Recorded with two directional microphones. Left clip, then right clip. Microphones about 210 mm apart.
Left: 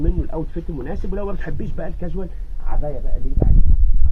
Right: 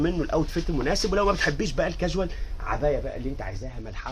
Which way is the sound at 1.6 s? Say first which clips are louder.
Right 5 dB; 20° right (ahead or behind).